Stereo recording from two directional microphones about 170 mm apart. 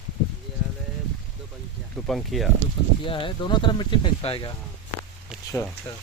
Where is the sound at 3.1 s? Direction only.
30° left (ahead or behind).